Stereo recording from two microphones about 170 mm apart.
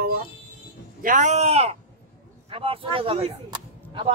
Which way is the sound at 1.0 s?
45° right (ahead or behind).